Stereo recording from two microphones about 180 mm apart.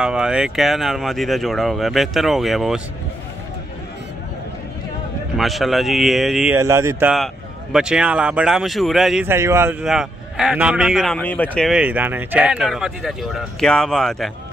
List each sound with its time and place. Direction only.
0.0 s a man's voice: 5° right (ahead or behind)
5.4 s a man's voice: centre (ahead or behind)
6.5 s speech: 15° right (ahead or behind)
7.7 s a man's voice: 5° right (ahead or behind)
9.8 s a man's voice: centre (ahead or behind)